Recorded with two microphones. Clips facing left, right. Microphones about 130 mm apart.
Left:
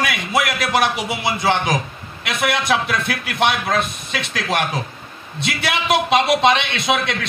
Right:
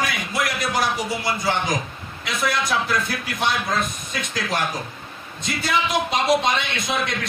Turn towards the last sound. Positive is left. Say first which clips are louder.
# left 5 dB
turn(degrees=75)  # may be behind; listen again after turning